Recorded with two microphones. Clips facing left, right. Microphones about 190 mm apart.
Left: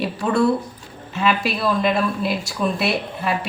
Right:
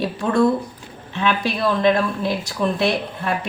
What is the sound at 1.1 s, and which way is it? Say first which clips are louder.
A woman's voice: even; 5° left (ahead or behind).